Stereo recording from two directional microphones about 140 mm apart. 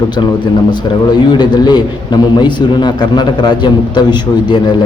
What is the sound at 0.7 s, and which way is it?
A man's voice, 30° left (ahead or behind).